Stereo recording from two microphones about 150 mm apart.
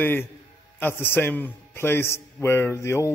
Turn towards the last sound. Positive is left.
turn(degrees=20)  # may be behind; listen again after turning